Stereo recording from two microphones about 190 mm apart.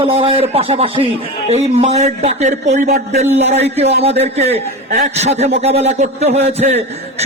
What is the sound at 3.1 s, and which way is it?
Speech, 35° right (ahead or behind).